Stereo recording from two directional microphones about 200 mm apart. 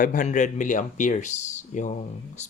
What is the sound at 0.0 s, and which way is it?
Speech, 40° left (ahead or behind).